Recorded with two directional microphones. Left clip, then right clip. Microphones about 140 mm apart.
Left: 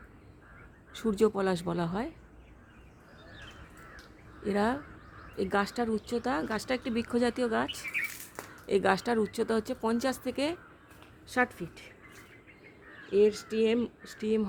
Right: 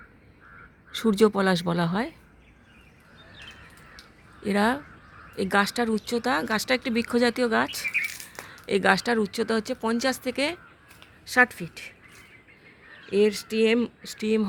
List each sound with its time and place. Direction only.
0.9 s a woman's voice: 45° right (ahead or behind)
4.4 s speech: 35° right (ahead or behind)
8.6 s speech: 25° right (ahead or behind)
11.3 s a woman's voice: 50° right (ahead or behind)
13.1 s speech: 60° right (ahead or behind)